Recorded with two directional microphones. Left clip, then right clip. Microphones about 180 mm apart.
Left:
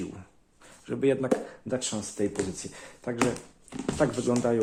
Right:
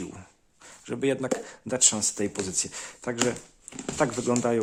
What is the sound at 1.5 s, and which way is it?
Speech, 35° right (ahead or behind).